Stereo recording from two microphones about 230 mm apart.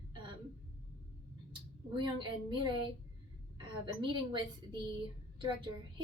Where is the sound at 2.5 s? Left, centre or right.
Right.